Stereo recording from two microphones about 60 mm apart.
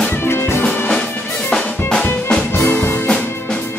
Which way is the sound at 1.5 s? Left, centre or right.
Centre.